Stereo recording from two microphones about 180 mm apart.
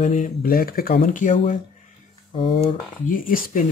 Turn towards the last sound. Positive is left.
turn(degrees=50)  # may be behind; listen again after turning